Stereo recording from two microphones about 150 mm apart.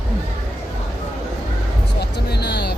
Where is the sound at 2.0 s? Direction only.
90° left.